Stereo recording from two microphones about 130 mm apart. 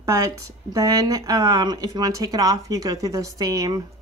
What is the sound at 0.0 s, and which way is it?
A woman's voice, 25° right (ahead or behind).